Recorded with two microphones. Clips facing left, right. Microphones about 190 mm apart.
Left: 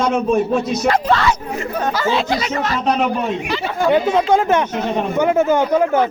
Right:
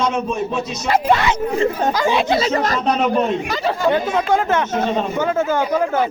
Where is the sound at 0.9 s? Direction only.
10° right (ahead or behind); by 1.9 s 30° right (ahead or behind).